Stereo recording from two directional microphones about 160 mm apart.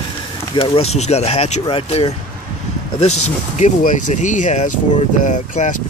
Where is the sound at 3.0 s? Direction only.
45° left (ahead or behind).